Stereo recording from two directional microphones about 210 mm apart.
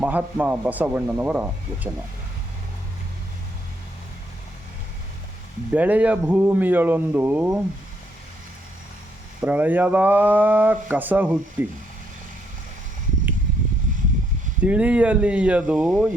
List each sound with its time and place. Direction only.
0.0 s speech: 10° right (ahead or behind)
5.7 s speech: 5° right (ahead or behind)
9.4 s speech: 10° right (ahead or behind)
13.9 s a sound: 40° right (ahead or behind)
14.6 s speech: 5° right (ahead or behind)